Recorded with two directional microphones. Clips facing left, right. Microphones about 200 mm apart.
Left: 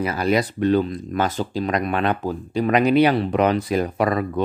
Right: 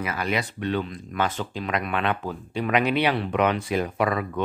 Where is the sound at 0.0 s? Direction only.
35° left (ahead or behind).